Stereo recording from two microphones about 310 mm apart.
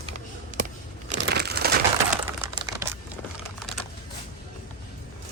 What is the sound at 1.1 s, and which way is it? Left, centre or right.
Crushing, right.